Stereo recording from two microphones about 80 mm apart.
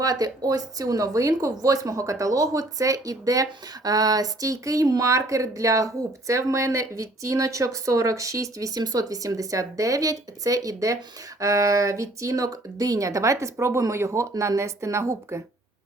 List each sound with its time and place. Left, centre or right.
0.0 s speech: right